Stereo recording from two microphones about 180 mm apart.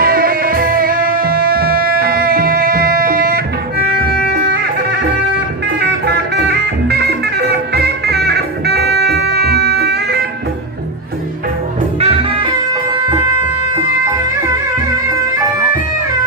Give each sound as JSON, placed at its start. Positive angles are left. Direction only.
{"t": 0.0, "sound": "music", "side_deg": -55}
{"t": 6.1, "sound": "music", "side_deg": -65}
{"t": 11.9, "sound": "music", "side_deg": -35}